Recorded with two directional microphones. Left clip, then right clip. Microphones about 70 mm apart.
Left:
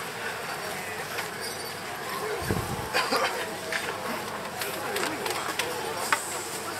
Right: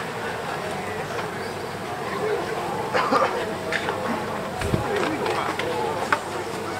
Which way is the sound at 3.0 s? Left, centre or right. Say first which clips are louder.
Right 5 dB; left.